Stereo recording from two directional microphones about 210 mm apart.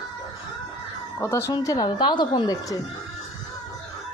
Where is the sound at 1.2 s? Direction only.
10° left (ahead or behind).